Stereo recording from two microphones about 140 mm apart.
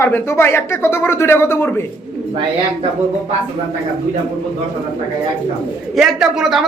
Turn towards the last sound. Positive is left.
turn(degrees=0)  # may be behind; listen again after turning